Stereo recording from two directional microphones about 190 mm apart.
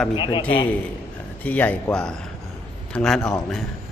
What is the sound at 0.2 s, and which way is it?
Speech, 25° left (ahead or behind).